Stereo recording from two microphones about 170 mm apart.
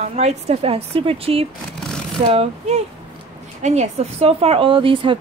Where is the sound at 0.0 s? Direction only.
40° right (ahead or behind).